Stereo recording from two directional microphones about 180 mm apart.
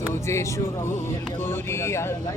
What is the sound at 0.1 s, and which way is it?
Music, 15° left (ahead or behind).